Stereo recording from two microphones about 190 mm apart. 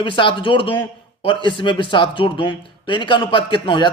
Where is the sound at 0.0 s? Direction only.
25° left (ahead or behind).